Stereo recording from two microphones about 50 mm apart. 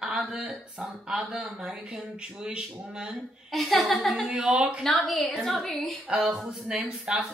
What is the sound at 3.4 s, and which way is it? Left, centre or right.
A woman's voice, centre.